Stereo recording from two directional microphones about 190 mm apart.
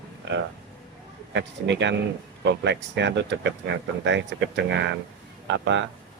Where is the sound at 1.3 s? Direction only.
65° right (ahead or behind).